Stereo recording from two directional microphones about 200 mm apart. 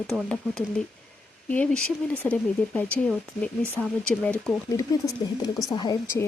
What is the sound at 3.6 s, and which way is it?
Speech, 10° right (ahead or behind).